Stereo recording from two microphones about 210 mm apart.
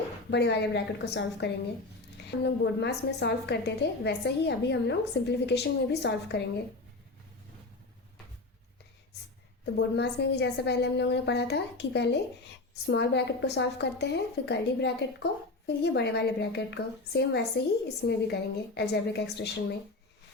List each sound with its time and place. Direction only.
0.3 s a woman's voice: 55° left (ahead or behind)
9.7 s a woman's voice: 55° left (ahead or behind)